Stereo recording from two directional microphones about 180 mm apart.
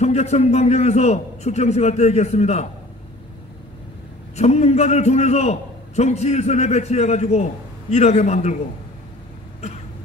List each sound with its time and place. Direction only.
0.0 s a man's voice: 35° left (ahead or behind)
4.4 s a man's voice: 40° left (ahead or behind)